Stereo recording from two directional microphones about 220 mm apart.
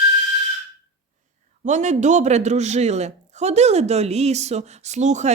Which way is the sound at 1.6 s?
35° right (ahead or behind).